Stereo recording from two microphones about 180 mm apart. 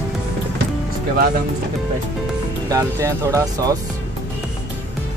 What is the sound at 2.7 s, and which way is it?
Speech, 15° right (ahead or behind).